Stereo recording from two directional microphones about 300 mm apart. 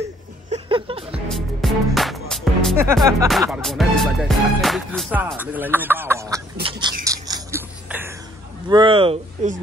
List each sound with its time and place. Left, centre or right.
0.5 s a sound: centre
1.3 s music: centre
2.9 s speech: centre
7.1 s crushing: centre
8.6 s speech: centre